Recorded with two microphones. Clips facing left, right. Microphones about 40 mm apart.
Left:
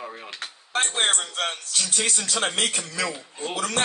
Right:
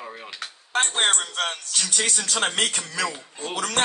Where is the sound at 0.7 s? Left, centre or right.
Right.